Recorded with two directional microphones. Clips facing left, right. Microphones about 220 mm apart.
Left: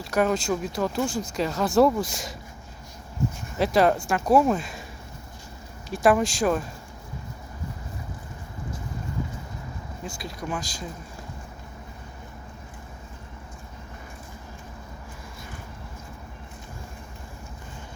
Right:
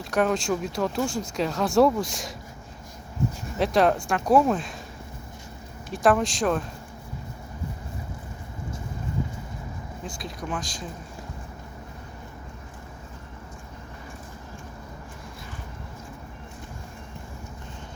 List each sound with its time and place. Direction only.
0.1 s speech: 5° left (ahead or behind)
3.6 s speech: 5° left (ahead or behind)
5.9 s speech: 5° left (ahead or behind)
10.2 s speech: 5° left (ahead or behind)